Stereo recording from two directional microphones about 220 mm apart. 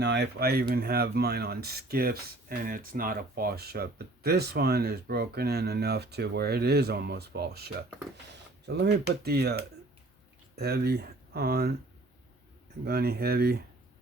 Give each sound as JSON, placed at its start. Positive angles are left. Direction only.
{"t": 0.0, "sound": "speech", "side_deg": -50}
{"t": 8.3, "sound": "a sound", "side_deg": -50}
{"t": 9.2, "sound": "speech", "side_deg": -45}
{"t": 12.8, "sound": "speech", "side_deg": -45}